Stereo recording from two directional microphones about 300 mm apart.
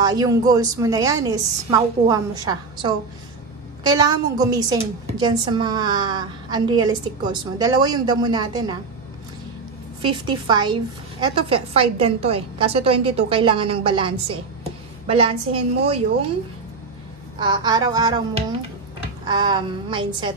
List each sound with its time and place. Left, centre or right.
0.0 s a woman's voice: centre
10.0 s a woman's voice: centre
17.4 s a woman's voice: centre
19.2 s a woman's voice: centre